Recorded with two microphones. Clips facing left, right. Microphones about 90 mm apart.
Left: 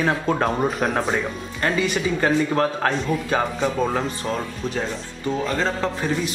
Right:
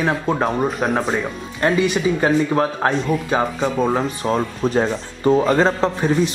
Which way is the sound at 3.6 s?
5° right (ahead or behind).